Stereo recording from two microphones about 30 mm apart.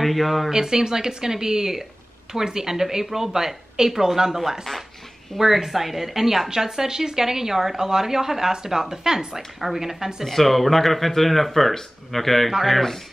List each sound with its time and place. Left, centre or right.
0.0 s speech: centre
0.5 s a woman's voice: right
5.4 s a woman's voice: centre
10.2 s speech: centre